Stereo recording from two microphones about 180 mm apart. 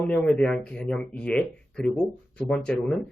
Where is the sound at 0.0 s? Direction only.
5° left (ahead or behind).